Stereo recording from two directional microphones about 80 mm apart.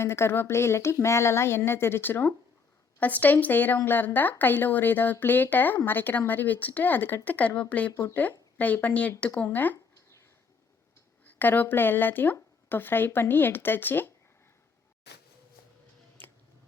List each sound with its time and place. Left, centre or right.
0.0 s a woman's voice: left
11.3 s speech: left